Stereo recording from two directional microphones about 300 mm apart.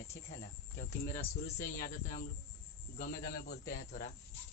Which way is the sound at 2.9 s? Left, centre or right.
Left.